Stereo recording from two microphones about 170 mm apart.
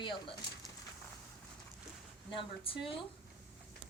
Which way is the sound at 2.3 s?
30° left (ahead or behind).